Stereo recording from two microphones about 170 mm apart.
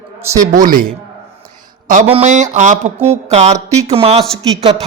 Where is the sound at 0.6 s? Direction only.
55° right (ahead or behind).